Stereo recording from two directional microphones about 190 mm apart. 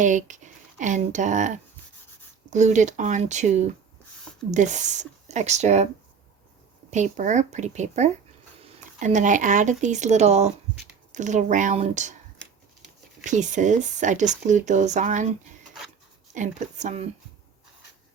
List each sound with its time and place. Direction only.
0.0 s speech: 40° right (ahead or behind)
6.9 s speech: 40° right (ahead or behind)
13.2 s speech: 40° right (ahead or behind)